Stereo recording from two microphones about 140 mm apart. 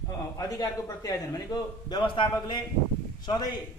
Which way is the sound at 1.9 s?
35° left (ahead or behind).